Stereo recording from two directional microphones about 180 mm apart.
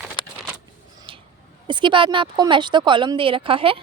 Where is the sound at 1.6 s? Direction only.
25° right (ahead or behind).